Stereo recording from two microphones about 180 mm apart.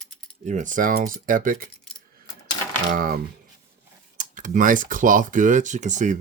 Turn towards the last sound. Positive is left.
turn(degrees=-45)  # may be behind; listen again after turning